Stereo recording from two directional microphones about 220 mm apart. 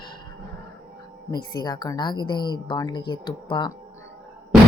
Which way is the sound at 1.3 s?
20° left (ahead or behind).